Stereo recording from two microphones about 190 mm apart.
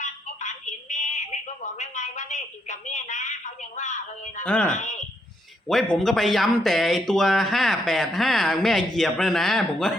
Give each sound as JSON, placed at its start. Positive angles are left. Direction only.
{"t": 0.0, "sound": "a sound", "side_deg": 40}
{"t": 1.8, "sound": "a woman's voice", "side_deg": 40}
{"t": 4.4, "sound": "speech", "side_deg": 5}